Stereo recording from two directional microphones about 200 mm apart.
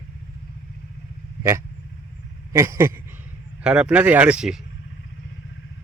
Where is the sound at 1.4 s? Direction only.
15° right (ahead or behind).